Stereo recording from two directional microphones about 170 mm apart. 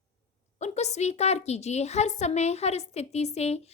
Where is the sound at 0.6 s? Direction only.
40° left (ahead or behind).